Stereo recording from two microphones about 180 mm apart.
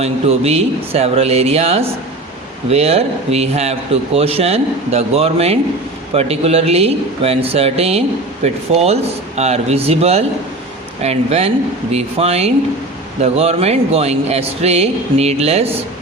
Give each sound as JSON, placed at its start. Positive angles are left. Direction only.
{"t": 0.0, "sound": "a man's voice", "side_deg": -35}